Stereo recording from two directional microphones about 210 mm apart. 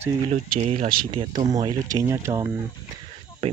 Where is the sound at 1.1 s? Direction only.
20° right (ahead or behind).